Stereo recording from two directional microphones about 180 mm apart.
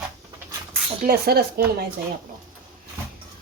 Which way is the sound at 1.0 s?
60° right (ahead or behind).